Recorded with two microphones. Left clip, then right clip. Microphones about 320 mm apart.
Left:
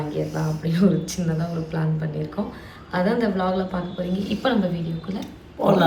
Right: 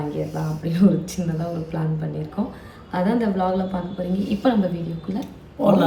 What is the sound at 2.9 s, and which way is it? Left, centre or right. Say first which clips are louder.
Speech: even; centre.